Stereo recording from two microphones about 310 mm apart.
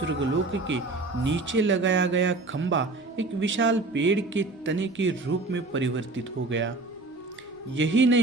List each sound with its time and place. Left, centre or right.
0.0 s speech: right
7.8 s speech: right